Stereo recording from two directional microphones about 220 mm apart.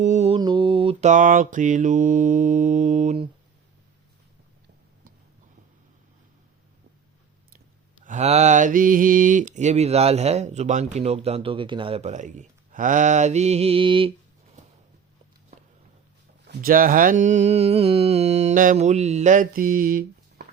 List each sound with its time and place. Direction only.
0.0 s mantra: 30° right (ahead or behind)
8.0 s mantra: 30° right (ahead or behind)
16.5 s mantra: 40° right (ahead or behind)